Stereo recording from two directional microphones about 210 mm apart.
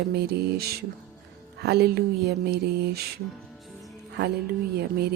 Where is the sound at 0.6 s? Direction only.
50° right (ahead or behind).